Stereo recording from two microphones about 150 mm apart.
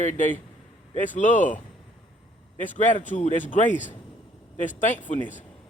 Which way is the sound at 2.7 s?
55° left (ahead or behind).